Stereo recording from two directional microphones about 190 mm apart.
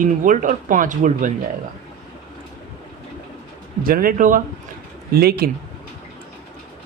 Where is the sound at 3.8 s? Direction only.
50° right (ahead or behind).